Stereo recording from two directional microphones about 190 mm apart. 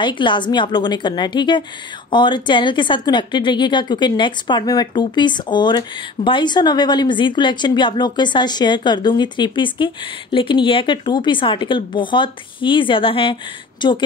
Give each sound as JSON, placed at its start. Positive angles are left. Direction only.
{"t": 0.0, "sound": "a woman's voice", "side_deg": 25}